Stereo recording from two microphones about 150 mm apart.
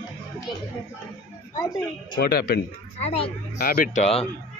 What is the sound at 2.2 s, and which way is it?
Speech, 90° left.